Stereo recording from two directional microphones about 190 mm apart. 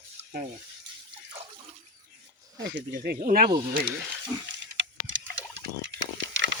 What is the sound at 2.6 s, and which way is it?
Speech, 60° right (ahead or behind).